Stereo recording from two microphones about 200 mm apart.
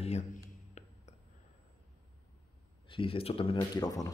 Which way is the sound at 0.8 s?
35° left (ahead or behind).